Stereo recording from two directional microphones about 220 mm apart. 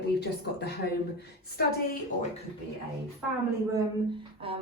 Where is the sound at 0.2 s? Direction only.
50° left (ahead or behind).